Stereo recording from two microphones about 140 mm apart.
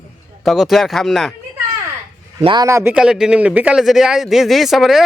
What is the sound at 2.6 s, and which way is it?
A man's voice, 20° right (ahead or behind).